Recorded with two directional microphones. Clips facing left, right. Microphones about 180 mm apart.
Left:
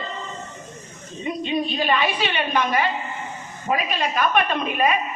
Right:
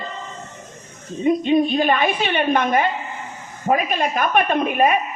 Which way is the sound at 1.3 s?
50° right (ahead or behind).